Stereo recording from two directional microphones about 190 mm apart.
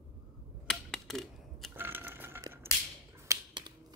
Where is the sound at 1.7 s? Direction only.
10° right (ahead or behind).